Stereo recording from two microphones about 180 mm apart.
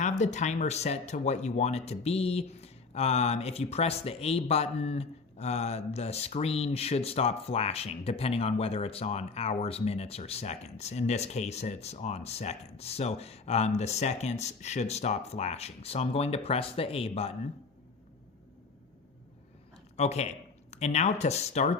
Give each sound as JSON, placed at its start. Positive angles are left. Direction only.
{"t": 0.0, "sound": "speech", "side_deg": 40}
{"t": 20.0, "sound": "speech", "side_deg": 40}